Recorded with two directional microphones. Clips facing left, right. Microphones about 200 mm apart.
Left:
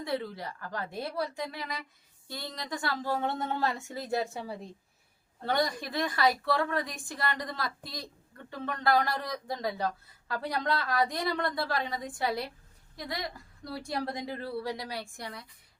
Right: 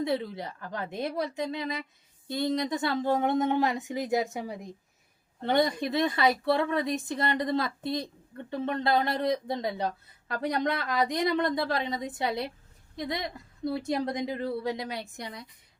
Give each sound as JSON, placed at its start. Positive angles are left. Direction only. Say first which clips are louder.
{"t": 0.0, "sound": "speech", "louder": "right 4 dB", "side_deg": -20}